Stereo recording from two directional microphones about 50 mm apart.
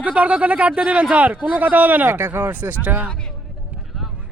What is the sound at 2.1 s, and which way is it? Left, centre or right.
Speech, right.